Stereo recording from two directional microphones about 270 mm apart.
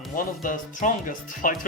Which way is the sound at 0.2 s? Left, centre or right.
Left.